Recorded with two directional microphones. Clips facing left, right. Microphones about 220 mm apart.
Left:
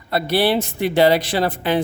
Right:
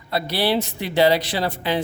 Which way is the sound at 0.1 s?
50° left (ahead or behind).